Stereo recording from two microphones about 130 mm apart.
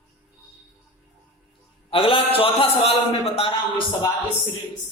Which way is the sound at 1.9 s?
45° left (ahead or behind).